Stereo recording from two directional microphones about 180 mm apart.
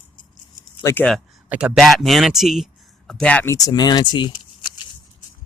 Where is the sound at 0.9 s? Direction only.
5° left (ahead or behind); by 4.7 s 25° left (ahead or behind).